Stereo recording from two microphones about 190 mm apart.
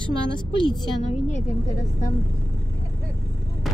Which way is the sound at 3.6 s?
Centre (ahead or behind).